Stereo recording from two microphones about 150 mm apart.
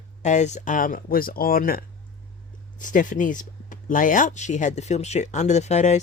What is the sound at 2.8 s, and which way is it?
Speech, 60° left (ahead or behind).